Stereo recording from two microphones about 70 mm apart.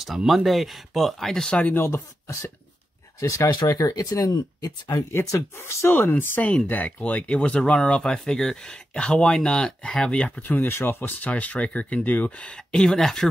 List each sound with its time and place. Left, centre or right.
0.0 s speech: centre
1.8 s speech: left
3.5 s speech: left
5.3 s speech: left
5.9 s speech: left
12.7 s speech: centre